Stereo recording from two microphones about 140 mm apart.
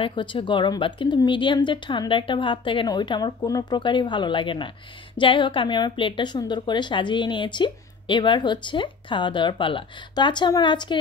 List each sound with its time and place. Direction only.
0.0 s a woman's voice: 35° left (ahead or behind)